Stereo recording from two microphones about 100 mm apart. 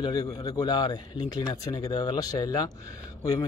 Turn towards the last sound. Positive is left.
turn(degrees=35)  # may be behind; listen again after turning